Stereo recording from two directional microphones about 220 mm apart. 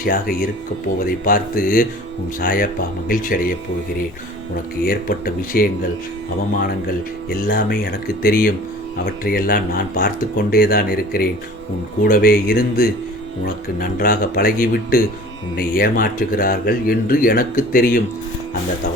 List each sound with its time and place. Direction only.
0.0 s speech: 40° left (ahead or behind)
4.9 s speech: 40° left (ahead or behind)
7.3 s speech: 40° left (ahead or behind)